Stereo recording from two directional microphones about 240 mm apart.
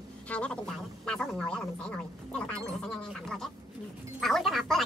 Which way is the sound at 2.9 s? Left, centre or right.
Centre.